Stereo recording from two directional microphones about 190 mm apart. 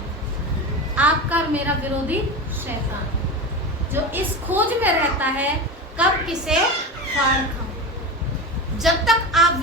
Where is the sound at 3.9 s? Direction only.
10° right (ahead or behind).